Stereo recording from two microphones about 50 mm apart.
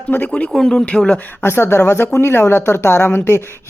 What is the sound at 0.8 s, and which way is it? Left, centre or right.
Speech, left.